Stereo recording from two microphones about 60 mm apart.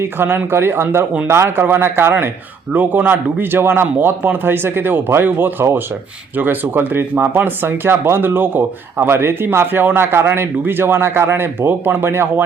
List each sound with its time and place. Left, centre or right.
0.0 s speech: right